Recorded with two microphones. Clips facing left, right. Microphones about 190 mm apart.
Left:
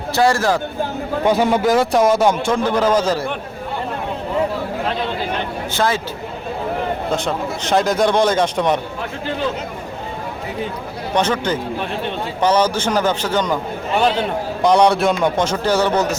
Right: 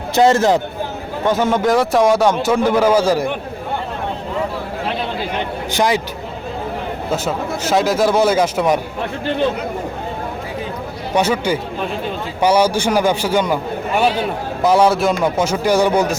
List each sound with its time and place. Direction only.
0.1 s speech: 20° right (ahead or behind)
1.2 s a man's voice: 15° left (ahead or behind)
1.6 s a man's voice: centre (ahead or behind)
5.7 s speech: 15° right (ahead or behind)
7.1 s a man's voice: 5° right (ahead or behind)
11.1 s speech: 10° right (ahead or behind)
14.6 s speech: 5° right (ahead or behind)